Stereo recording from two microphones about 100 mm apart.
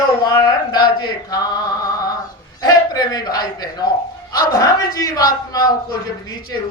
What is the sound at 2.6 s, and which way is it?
A woman's voice, 40° left (ahead or behind).